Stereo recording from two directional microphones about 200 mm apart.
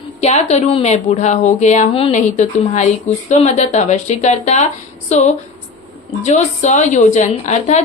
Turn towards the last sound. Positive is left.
turn(degrees=35)  # may be behind; listen again after turning